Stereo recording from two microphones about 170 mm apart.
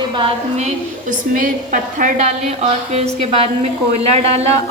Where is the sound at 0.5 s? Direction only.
45° right (ahead or behind).